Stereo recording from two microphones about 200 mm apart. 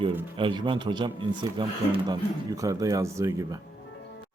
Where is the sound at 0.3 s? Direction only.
25° right (ahead or behind).